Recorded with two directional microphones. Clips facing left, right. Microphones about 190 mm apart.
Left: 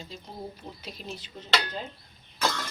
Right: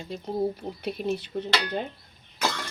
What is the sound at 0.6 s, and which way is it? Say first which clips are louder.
Speech: right 11 dB; 60° right (ahead or behind).